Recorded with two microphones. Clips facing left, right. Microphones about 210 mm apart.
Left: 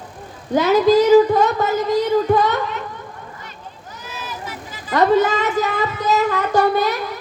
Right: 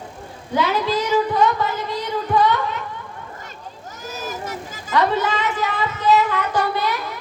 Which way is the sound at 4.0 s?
45° right (ahead or behind).